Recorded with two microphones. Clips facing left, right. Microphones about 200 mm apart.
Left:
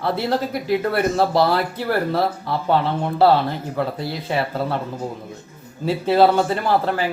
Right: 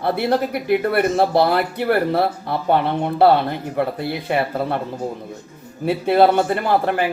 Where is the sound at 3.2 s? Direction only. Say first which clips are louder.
Right 1 dB; 55° right (ahead or behind).